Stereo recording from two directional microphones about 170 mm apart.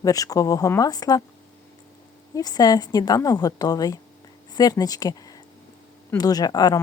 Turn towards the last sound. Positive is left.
turn(degrees=25)  # may be behind; listen again after turning